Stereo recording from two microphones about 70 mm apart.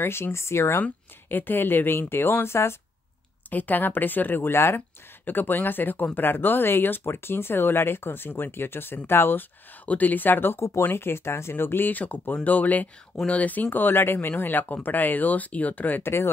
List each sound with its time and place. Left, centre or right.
0.0 s speech: left
3.4 s speech: left